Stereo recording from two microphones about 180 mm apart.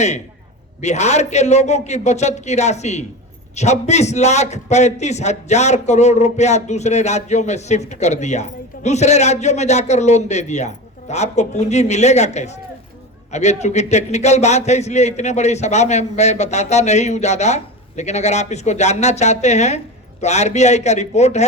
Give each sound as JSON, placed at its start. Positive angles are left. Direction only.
{"t": 0.8, "sound": "a man's voice", "side_deg": 40}